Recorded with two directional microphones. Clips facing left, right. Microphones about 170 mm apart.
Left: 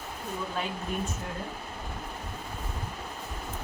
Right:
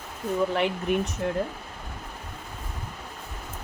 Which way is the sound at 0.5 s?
75° right (ahead or behind).